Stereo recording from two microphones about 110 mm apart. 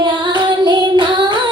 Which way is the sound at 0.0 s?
45° right (ahead or behind).